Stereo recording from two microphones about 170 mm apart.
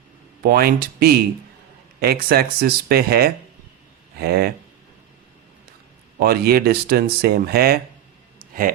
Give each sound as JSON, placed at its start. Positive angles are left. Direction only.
{"t": 0.4, "sound": "speech", "side_deg": -65}
{"t": 6.1, "sound": "speech", "side_deg": -65}
{"t": 8.4, "sound": "a sound", "side_deg": -55}